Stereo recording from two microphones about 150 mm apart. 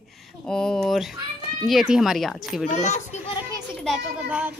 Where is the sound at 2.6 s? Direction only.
50° left (ahead or behind).